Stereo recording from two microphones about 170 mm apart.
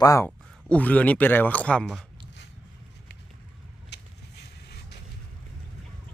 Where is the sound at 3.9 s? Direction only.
80° left.